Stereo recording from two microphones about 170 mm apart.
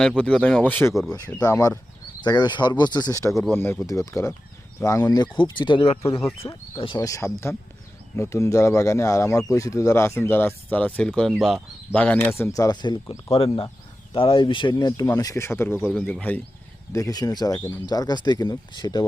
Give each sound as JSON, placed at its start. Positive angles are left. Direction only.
{"t": 0.2, "sound": "speech", "side_deg": 5}
{"t": 15.7, "sound": "speech", "side_deg": 0}
{"t": 16.3, "sound": "speech", "side_deg": 10}